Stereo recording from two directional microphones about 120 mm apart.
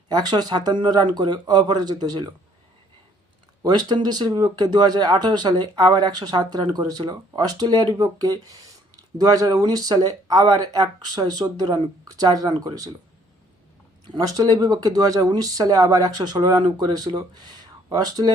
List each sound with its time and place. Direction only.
0.1 s speech: 35° right (ahead or behind)
3.6 s speech: 35° right (ahead or behind)
14.1 s speech: 30° right (ahead or behind)